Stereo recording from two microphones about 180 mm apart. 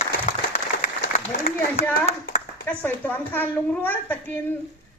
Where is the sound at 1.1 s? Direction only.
40° left (ahead or behind).